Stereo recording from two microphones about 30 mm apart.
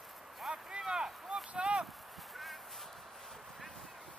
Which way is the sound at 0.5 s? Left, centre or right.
Right.